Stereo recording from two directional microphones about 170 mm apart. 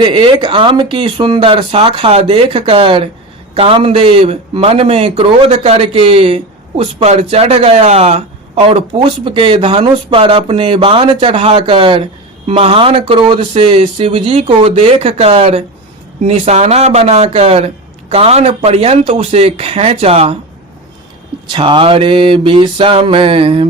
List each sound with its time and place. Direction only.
0.0 s a man's voice: 30° right (ahead or behind)
21.5 s a man's voice: 30° right (ahead or behind)